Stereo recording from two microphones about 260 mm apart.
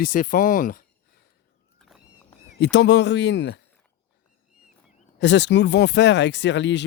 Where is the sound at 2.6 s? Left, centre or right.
Left.